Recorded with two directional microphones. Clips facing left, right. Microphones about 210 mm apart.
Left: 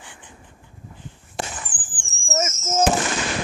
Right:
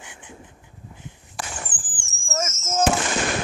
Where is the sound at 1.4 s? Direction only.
25° left (ahead or behind).